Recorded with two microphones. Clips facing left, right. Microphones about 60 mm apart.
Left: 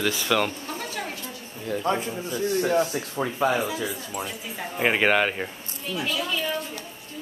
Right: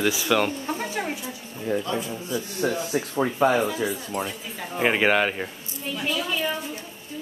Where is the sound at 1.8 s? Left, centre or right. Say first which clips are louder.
Left 3 dB; left.